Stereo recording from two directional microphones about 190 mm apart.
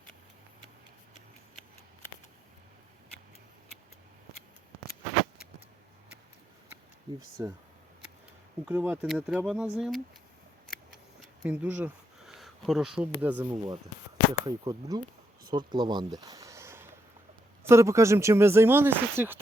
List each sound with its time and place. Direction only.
7.4 s speech: 15° right (ahead or behind)
8.6 s speech: 10° right (ahead or behind)
11.2 s speech: 10° right (ahead or behind); by 16.0 s 25° right (ahead or behind)
16.1 s a sound: 20° right (ahead or behind)
17.6 s speech: 15° right (ahead or behind)